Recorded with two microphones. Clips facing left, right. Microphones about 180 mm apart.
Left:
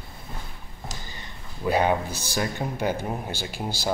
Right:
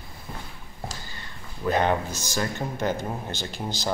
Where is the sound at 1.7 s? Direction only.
10° left (ahead or behind).